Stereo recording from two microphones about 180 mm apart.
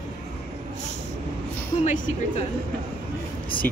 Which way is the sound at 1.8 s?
45° left (ahead or behind).